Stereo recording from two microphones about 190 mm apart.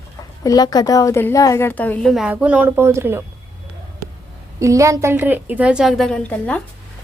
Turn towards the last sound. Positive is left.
turn(degrees=5)  # may be behind; listen again after turning